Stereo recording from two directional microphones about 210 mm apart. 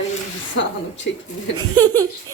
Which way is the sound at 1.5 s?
20° right (ahead or behind).